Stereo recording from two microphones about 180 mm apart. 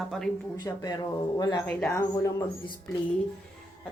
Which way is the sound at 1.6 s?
10° left (ahead or behind).